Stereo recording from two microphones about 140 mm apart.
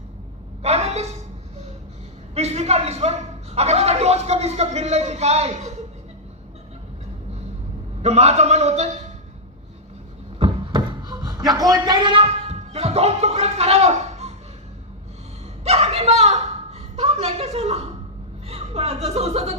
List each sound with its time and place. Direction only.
0.6 s a woman's voice: 50° right (ahead or behind)
2.3 s a man's voice: 50° right (ahead or behind)
8.0 s a man's voice: 50° right (ahead or behind)
10.4 s a sound: 45° right (ahead or behind)
10.8 s a sound: 30° right (ahead or behind)
11.5 s speech: 30° right (ahead or behind); by 14.3 s 50° right (ahead or behind)
15.6 s a woman's voice: 50° right (ahead or behind)